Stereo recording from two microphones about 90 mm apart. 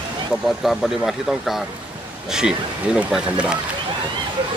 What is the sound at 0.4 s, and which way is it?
Speech, centre (ahead or behind).